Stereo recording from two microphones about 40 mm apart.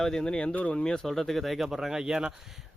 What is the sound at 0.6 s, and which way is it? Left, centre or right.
Speech, left.